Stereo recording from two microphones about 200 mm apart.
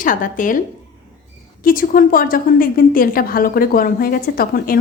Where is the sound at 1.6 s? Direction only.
45° left (ahead or behind).